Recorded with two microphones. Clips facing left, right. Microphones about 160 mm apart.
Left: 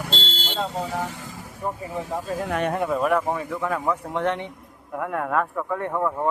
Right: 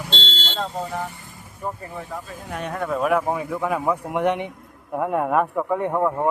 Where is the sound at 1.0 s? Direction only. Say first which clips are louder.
Left 2 dB; 90° left.